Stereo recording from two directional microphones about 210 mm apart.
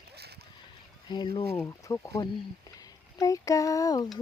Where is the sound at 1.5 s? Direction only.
15° left (ahead or behind).